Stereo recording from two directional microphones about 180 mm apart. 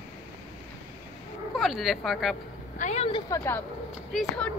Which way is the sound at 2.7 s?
40° left (ahead or behind).